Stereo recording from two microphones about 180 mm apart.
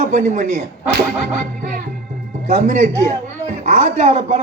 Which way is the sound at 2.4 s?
40° right (ahead or behind).